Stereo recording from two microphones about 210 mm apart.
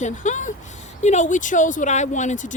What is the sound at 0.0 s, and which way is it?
Speech, 35° left (ahead or behind).